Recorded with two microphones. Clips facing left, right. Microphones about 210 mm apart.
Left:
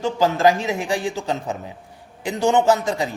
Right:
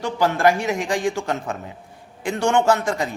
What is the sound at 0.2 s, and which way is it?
A man's voice, 15° left (ahead or behind).